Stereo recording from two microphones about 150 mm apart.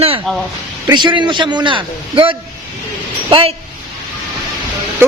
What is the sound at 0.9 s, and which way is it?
A man's voice, 30° right (ahead or behind).